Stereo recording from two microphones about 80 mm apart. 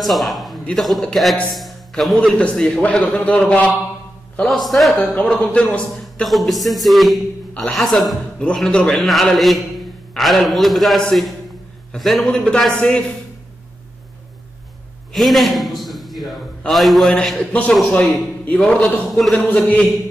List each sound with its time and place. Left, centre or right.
0.0 s a man's voice: centre
1.5 s a sound: centre
2.1 s a man's voice: centre
4.5 s a man's voice: centre
5.1 s a man's voice: centre
6.2 s a man's voice: centre
15.1 s a man's voice: centre